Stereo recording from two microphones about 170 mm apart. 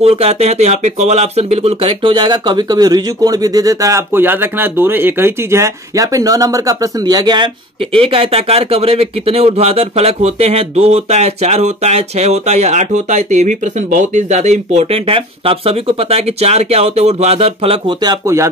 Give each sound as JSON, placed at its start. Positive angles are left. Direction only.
{"t": 0.0, "sound": "speech", "side_deg": -35}
{"t": 18.2, "sound": "speech", "side_deg": -15}